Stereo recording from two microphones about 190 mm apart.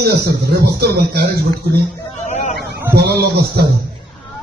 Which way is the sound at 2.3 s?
40° left (ahead or behind).